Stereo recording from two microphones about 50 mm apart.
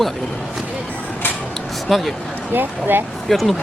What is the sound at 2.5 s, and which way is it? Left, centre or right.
Speech, right.